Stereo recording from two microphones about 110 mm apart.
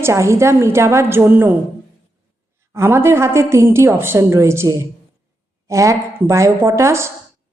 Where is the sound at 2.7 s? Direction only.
25° right (ahead or behind).